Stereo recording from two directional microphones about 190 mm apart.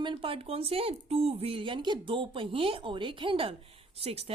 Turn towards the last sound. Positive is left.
turn(degrees=-30)  # may be behind; listen again after turning